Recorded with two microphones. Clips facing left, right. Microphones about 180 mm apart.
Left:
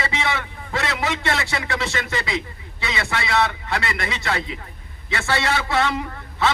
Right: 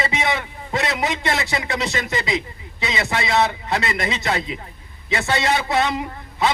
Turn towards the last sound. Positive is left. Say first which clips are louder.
# right 1 dB
turn(degrees=-15)  # may be behind; listen again after turning